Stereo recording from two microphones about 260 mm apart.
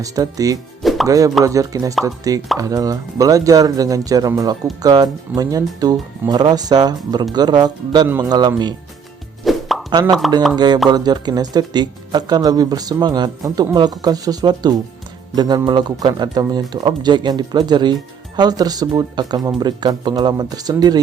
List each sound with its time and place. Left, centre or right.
0.0 s speech: centre
0.8 s plop: centre
1.0 s speech: centre
9.4 s plop: centre
9.9 s speech: centre